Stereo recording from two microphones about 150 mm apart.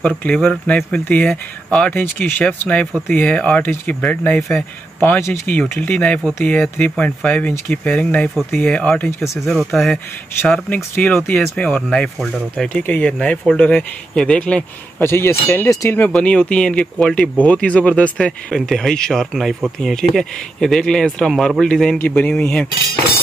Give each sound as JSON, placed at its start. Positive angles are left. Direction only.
{"t": 0.2, "sound": "speech", "side_deg": 5}
{"t": 10.4, "sound": "speech", "side_deg": 10}